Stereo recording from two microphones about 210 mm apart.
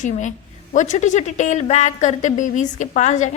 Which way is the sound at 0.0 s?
35° left (ahead or behind).